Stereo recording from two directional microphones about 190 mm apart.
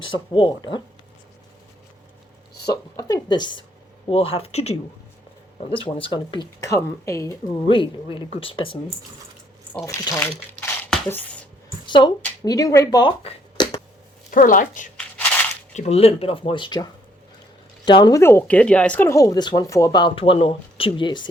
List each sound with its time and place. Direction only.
0.0 s speech: 25° left (ahead or behind)
2.6 s speech: 20° left (ahead or behind)
9.8 s speech: 15° left (ahead or behind)
10.6 s a sound: 5° left (ahead or behind)
11.9 s speech: 25° left (ahead or behind)
14.3 s speech: 45° left (ahead or behind); by 21.2 s 25° left (ahead or behind)